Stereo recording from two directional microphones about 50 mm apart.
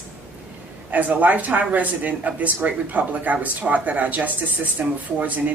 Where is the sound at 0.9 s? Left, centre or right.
Right.